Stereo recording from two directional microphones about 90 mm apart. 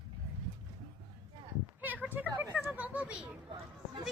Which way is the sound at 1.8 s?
20° right (ahead or behind).